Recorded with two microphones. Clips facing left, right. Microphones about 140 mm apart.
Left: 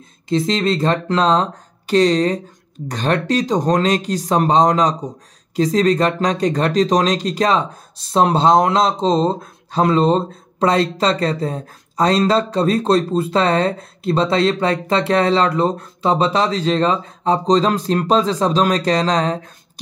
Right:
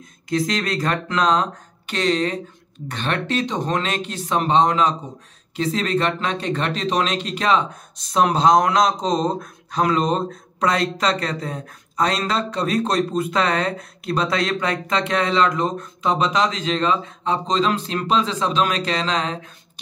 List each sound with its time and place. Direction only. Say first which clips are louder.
0.3 s speech: left 5 dB; 25° left (ahead or behind)